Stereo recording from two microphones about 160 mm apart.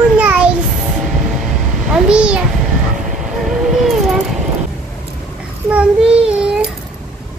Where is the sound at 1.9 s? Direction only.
5° right (ahead or behind).